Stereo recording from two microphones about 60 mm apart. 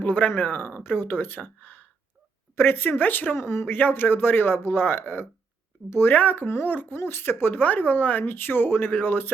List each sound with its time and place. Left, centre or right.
0.0 s speech: left
3.3 s speech: left
3.7 s speech: left